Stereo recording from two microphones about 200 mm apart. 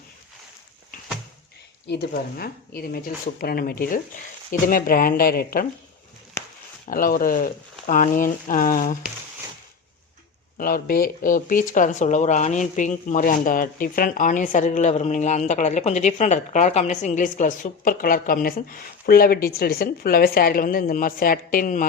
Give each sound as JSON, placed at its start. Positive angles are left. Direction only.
{"t": 1.9, "sound": "speech", "side_deg": 55}
{"t": 6.8, "sound": "speech", "side_deg": 45}
{"t": 10.6, "sound": "speech", "side_deg": 45}